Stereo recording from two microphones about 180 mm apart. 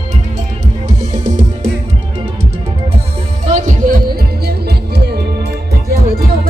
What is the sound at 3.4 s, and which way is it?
Music, 40° right (ahead or behind).